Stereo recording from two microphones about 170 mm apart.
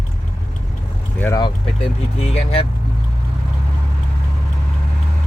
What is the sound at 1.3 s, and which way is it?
Speech, 30° left (ahead or behind).